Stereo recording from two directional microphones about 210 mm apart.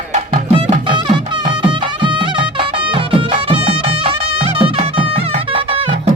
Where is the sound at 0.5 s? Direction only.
20° right (ahead or behind).